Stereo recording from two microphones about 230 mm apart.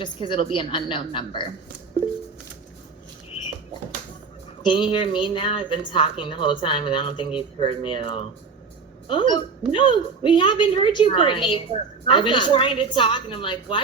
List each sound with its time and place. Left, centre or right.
0.0 s speech: left
4.6 s speech: left